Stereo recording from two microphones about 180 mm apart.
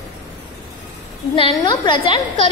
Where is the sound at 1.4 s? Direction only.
25° left (ahead or behind).